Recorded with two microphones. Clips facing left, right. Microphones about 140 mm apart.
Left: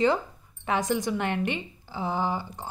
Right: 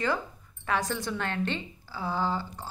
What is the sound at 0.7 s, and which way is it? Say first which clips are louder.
A woman's voice: left 4 dB; 20° left (ahead or behind).